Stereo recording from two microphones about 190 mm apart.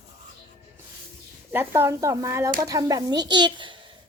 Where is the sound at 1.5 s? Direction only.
10° right (ahead or behind); by 3.9 s 25° right (ahead or behind).